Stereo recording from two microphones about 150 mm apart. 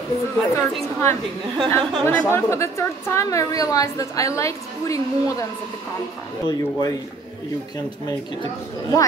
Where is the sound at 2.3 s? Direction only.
20° left (ahead or behind).